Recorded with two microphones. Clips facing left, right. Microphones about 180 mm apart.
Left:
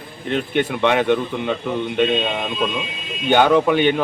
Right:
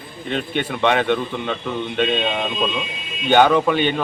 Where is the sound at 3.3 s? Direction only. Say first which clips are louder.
Even; 15° left (ahead or behind).